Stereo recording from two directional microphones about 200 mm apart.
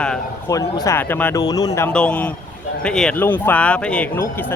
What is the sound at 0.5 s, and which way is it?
Speech, 15° left (ahead or behind).